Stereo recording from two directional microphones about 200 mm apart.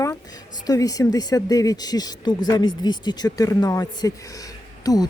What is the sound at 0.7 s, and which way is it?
Speech, 15° left (ahead or behind).